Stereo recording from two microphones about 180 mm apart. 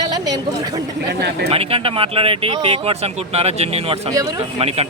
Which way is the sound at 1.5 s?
30° right (ahead or behind).